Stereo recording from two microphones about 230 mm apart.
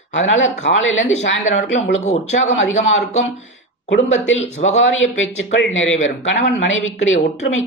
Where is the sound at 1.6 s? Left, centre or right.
Left.